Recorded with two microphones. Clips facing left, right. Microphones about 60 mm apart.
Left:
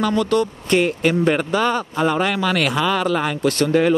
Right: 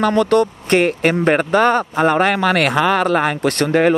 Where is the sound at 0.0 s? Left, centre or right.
Right.